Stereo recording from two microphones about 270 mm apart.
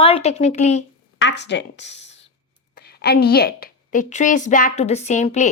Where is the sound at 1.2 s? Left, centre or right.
Left.